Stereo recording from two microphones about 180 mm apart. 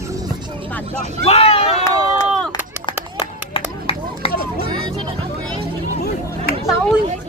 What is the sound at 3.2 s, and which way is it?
Run, 30° left (ahead or behind).